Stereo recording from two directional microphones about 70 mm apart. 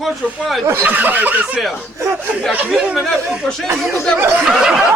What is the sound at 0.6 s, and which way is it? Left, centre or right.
Speech, right.